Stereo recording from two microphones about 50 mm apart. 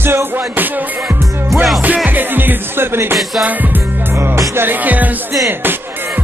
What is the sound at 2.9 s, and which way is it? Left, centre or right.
Music, right.